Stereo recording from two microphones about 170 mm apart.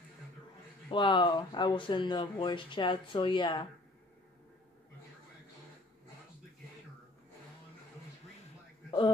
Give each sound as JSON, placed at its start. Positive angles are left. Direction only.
{"t": 0.8, "sound": "speech", "side_deg": 30}